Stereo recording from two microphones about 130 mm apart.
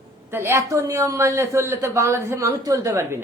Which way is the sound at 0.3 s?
20° right (ahead or behind).